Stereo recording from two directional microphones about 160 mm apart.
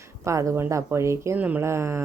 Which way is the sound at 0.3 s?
20° right (ahead or behind).